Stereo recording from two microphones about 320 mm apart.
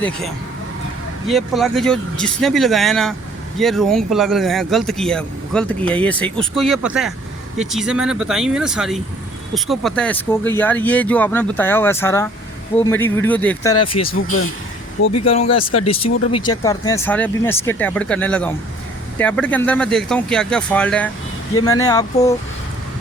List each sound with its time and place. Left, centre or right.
1.3 s speech: centre
14.3 s speech: left
15.2 s speech: centre